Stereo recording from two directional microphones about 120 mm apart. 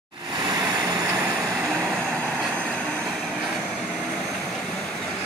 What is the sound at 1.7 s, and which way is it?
Train, 5° left (ahead or behind).